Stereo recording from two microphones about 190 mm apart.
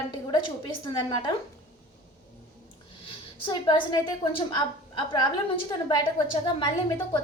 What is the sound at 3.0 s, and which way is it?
A woman's voice, 25° left (ahead or behind).